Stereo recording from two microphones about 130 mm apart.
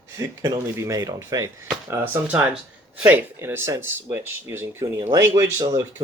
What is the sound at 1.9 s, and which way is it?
Speech, 15° right (ahead or behind).